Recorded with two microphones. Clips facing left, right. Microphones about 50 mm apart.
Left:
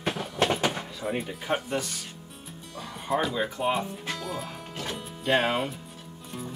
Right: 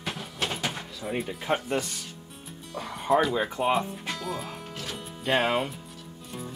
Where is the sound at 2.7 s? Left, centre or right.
Centre.